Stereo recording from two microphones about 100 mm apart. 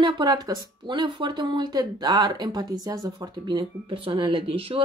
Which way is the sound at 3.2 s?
50° right (ahead or behind).